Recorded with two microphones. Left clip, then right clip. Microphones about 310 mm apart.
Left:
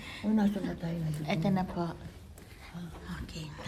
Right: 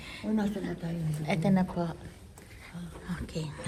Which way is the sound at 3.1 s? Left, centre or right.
Centre.